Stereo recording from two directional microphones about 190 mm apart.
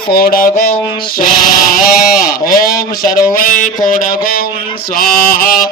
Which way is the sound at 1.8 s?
50° left (ahead or behind).